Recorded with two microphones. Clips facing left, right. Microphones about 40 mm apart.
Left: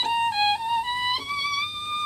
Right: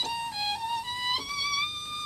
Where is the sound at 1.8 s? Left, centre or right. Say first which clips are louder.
Left 8 dB; left.